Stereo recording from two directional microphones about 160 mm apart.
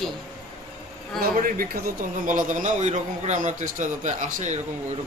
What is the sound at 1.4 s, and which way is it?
A man's voice, 60° right (ahead or behind).